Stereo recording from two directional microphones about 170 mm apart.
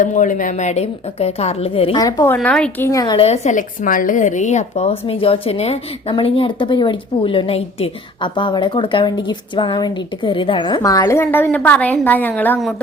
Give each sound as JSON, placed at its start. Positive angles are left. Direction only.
{"t": 0.0, "sound": "speech", "side_deg": 50}
{"t": 2.0, "sound": "speech", "side_deg": 20}
{"t": 3.2, "sound": "speech", "side_deg": 40}